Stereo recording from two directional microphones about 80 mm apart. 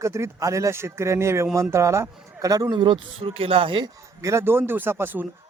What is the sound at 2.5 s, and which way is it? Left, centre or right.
Speech, right.